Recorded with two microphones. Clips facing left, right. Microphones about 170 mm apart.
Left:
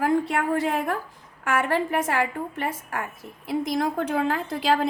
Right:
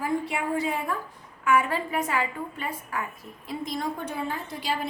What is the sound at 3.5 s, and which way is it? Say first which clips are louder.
A child's voice: left 6 dB; 90° left.